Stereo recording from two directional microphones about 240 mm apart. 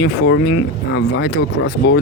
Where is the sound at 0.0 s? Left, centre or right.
Left.